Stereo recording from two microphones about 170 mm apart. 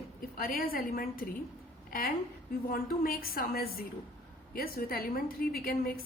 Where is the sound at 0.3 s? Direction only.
60° left (ahead or behind).